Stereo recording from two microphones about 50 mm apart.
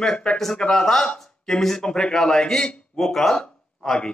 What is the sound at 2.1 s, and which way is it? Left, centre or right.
A man's voice, centre.